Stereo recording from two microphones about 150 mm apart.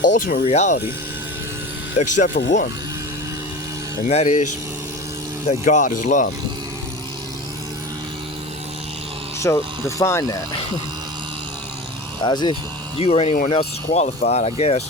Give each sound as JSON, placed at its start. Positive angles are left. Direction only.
{"t": 0.2, "sound": "speech", "side_deg": 80}
{"t": 0.4, "sound": "speech", "side_deg": 50}
{"t": 2.0, "sound": "speech", "side_deg": 55}
{"t": 4.1, "sound": "speech", "side_deg": 50}
{"t": 5.5, "sound": "speech", "side_deg": 55}
{"t": 9.4, "sound": "speech", "side_deg": 20}
{"t": 12.2, "sound": "speech", "side_deg": 30}
{"t": 13.0, "sound": "speech", "side_deg": 45}